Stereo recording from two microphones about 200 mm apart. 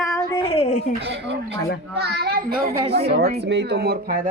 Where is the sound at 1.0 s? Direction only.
60° right (ahead or behind).